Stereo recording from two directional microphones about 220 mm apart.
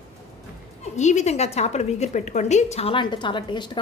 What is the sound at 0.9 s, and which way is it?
A woman's voice, 30° left (ahead or behind).